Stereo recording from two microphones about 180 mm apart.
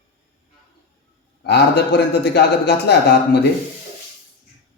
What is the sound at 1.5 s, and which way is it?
A man's voice, 70° left (ahead or behind).